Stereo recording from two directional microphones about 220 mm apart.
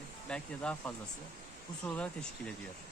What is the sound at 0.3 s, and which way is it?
Speech, 5° left (ahead or behind).